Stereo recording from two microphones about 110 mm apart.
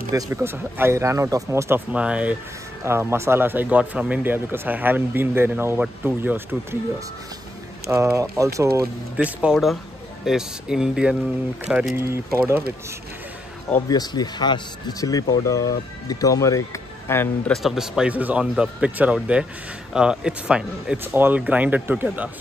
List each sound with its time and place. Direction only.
0.1 s speech: 20° right (ahead or behind)
1.9 s speech: 10° right (ahead or behind)
2.8 s speech: 25° right (ahead or behind)
7.9 s speech: 25° right (ahead or behind)
9.1 s speech: 10° right (ahead or behind)
12.1 s speech: 25° right (ahead or behind)
13.8 s speech: 40° left (ahead or behind)
17.5 s speech: centre (ahead or behind)
21.0 s speech: 20° right (ahead or behind)